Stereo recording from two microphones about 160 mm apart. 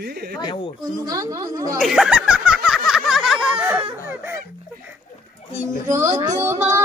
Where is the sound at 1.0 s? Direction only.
20° right (ahead or behind).